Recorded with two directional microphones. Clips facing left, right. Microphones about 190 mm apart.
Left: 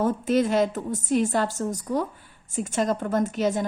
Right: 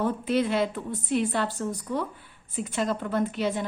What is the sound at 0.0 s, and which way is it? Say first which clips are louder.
A woman's voice: left 3 dB; 45° left (ahead or behind).